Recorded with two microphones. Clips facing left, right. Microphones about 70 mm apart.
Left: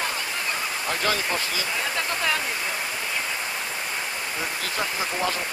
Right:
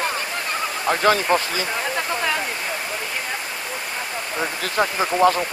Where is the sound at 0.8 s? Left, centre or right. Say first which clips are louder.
Right 9 dB; right.